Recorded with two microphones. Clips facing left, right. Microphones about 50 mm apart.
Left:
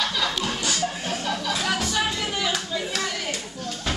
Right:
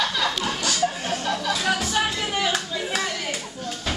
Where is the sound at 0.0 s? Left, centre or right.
Centre.